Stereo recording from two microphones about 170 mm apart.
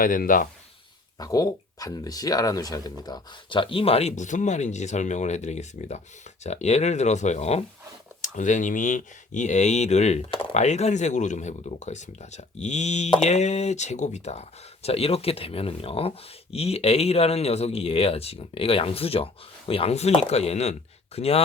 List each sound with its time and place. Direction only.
0.0 s speech: 55° left (ahead or behind)
1.2 s speech: 20° left (ahead or behind); by 21.4 s 35° left (ahead or behind)